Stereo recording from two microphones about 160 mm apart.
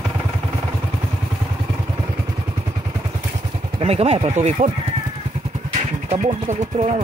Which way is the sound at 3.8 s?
40° right (ahead or behind).